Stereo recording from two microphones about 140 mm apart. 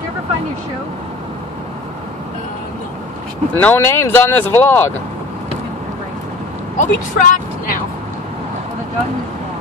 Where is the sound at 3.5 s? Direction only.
15° left (ahead or behind).